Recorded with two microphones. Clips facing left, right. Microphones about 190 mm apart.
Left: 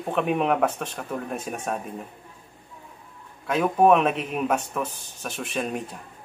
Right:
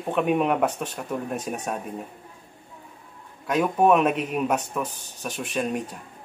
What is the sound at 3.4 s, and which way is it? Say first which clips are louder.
Speech: left 1 dB; 5° right (ahead or behind).